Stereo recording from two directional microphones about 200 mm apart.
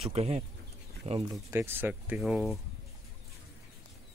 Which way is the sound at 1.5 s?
10° right (ahead or behind).